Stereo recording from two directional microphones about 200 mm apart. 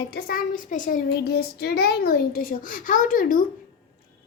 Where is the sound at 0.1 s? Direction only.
45° left (ahead or behind).